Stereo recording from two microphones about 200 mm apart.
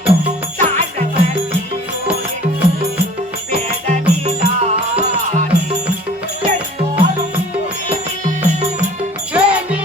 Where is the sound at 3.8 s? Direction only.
35° right (ahead or behind).